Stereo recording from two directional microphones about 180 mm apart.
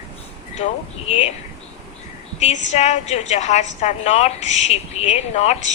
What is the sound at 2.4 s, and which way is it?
A woman's voice, 40° left (ahead or behind).